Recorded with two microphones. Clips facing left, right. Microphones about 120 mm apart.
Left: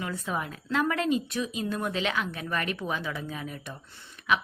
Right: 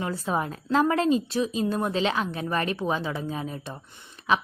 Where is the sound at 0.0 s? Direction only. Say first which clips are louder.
Right 5 dB; 35° right (ahead or behind).